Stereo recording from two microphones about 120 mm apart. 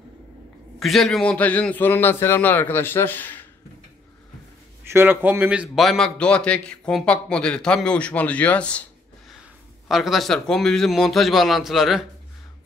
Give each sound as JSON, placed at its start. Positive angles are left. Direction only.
{"t": 0.7, "sound": "a man's voice", "side_deg": 0}
{"t": 4.8, "sound": "speech", "side_deg": -20}
{"t": 5.8, "sound": "a man's voice", "side_deg": 0}
{"t": 9.8, "sound": "a man's voice", "side_deg": 0}